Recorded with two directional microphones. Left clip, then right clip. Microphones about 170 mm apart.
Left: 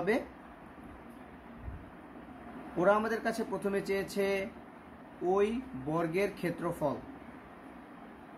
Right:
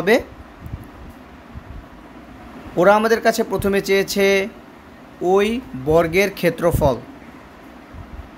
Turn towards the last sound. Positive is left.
turn(degrees=-60)  # may be behind; listen again after turning